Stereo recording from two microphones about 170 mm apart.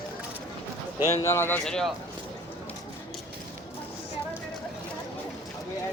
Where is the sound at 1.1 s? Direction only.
15° left (ahead or behind).